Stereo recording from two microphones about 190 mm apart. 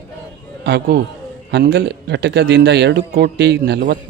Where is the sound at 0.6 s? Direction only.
60° right (ahead or behind).